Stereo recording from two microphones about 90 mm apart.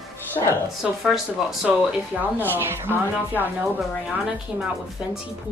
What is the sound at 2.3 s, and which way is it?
Speech, 25° right (ahead or behind).